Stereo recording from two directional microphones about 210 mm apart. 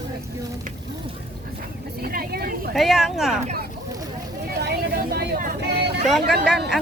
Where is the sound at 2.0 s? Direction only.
45° right (ahead or behind).